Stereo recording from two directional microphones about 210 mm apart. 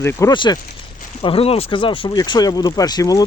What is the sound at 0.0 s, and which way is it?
Speech, 10° left (ahead or behind).